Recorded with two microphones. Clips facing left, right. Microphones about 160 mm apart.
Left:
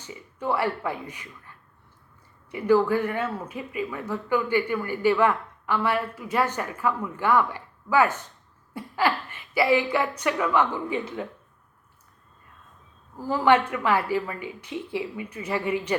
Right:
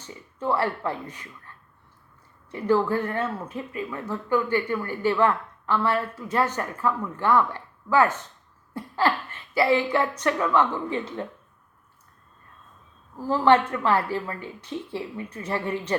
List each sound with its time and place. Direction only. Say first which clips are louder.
0.0 s speech: right 1 dB; 10° left (ahead or behind)
2.5 s speech: left 2 dB; 10° left (ahead or behind)
13.1 s speech: right 1 dB; 10° left (ahead or behind)